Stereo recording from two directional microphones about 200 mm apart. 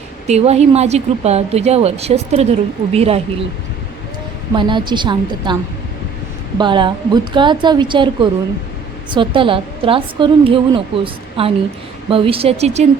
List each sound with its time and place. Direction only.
0.3 s speech: 30° right (ahead or behind)
4.5 s a woman's voice: 25° right (ahead or behind)
6.6 s a woman's voice: 25° right (ahead or behind)